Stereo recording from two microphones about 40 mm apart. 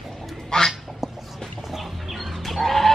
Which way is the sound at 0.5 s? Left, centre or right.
Centre.